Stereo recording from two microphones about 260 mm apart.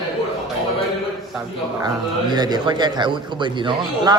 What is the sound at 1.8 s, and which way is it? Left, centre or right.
A man's voice, centre.